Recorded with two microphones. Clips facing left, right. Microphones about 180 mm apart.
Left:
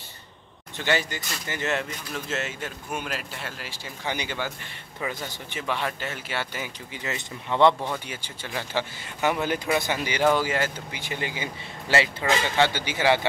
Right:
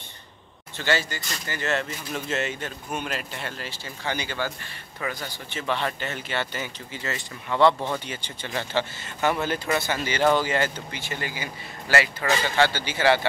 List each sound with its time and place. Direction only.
0.7 s speech: 15° left (ahead or behind)
2.1 s speech: centre (ahead or behind); by 7.9 s 20° left (ahead or behind)
7.9 s speech: 5° left (ahead or behind)
11.0 s speech: 15° left (ahead or behind)